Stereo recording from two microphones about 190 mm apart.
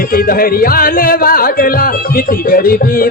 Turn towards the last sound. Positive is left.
turn(degrees=50)  # may be behind; listen again after turning